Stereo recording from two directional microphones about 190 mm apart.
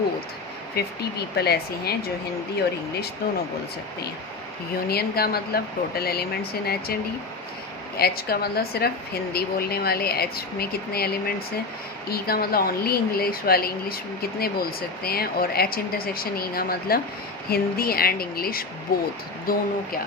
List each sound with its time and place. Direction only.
0.8 s a woman's voice: 55° left (ahead or behind)
4.9 s a woman's voice: 55° left (ahead or behind)